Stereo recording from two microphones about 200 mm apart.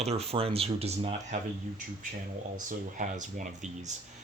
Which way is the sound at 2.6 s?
40° right (ahead or behind).